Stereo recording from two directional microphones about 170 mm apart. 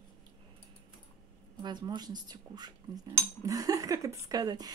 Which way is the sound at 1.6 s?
25° right (ahead or behind).